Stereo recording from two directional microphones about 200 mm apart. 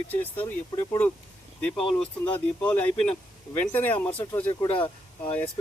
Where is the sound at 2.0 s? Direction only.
5° left (ahead or behind).